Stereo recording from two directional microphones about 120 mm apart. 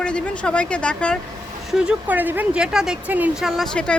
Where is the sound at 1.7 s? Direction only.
5° right (ahead or behind).